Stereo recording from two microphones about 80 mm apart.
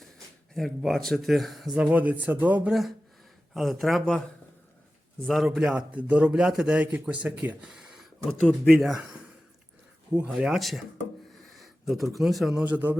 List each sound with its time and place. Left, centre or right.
0.5 s speech: centre
1.7 s speech: centre
2.6 s speech: centre
5.2 s a man's voice: centre
7.6 s a sound: centre
8.2 s speech: centre
9.0 s a sound: centre
10.3 s speech: centre
12.6 s speech: right